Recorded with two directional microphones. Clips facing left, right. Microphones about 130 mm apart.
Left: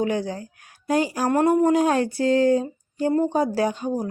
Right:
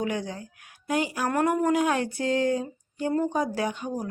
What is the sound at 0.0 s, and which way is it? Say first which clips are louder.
Speech: left 5 dB; 30° left (ahead or behind).